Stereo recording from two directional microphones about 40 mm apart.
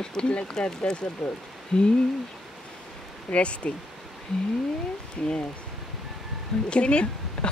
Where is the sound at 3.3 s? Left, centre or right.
Left.